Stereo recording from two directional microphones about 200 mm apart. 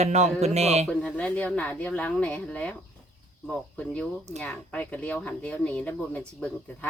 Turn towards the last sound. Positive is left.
turn(degrees=5)  # may be behind; listen again after turning